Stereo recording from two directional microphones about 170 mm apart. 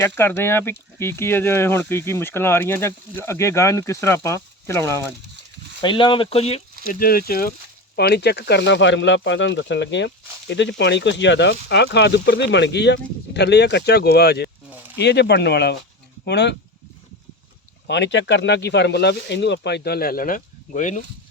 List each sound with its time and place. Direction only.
0.0 s speech: 15° left (ahead or behind)
5.8 s speech: 30° left (ahead or behind)
7.0 s speech: 60° left (ahead or behind)
7.9 s speech: 75° left (ahead or behind)
14.9 s speech: 80° left
17.8 s speech: 90° left; by 21.0 s 45° left (ahead or behind)